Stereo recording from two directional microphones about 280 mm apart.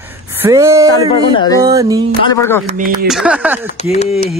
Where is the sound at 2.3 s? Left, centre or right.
Centre.